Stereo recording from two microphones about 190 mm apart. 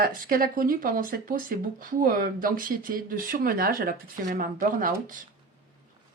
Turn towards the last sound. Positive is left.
turn(degrees=-45)  # may be behind; listen again after turning